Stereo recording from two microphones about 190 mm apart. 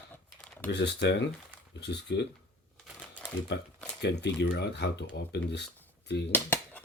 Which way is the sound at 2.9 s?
5° right (ahead or behind).